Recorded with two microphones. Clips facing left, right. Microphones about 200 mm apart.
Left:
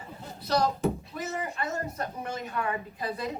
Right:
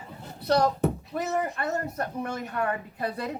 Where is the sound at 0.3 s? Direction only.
65° right (ahead or behind).